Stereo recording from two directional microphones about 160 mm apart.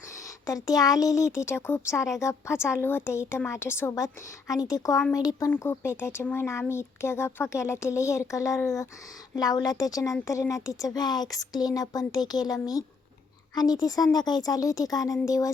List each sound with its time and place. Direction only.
0.4 s speech: 25° left (ahead or behind)
13.6 s speech: 25° left (ahead or behind)